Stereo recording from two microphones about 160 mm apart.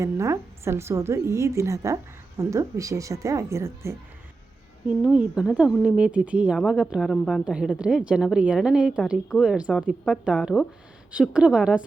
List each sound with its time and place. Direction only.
0.0 s a woman's voice: 20° right (ahead or behind)
4.9 s a woman's voice: 10° right (ahead or behind)